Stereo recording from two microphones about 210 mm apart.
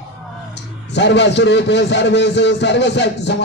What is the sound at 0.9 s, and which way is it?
A man's voice, 55° left (ahead or behind).